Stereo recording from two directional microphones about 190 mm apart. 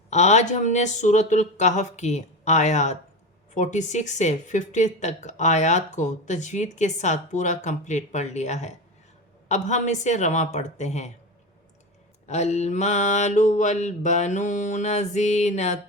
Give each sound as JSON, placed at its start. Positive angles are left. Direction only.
{"t": 0.1, "sound": "speech", "side_deg": 35}
{"t": 12.3, "sound": "speech", "side_deg": 35}